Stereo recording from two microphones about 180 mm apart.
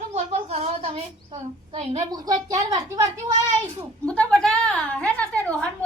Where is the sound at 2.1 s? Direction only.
20° right (ahead or behind).